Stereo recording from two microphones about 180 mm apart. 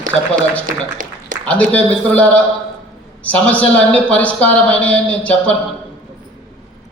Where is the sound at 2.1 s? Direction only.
10° left (ahead or behind).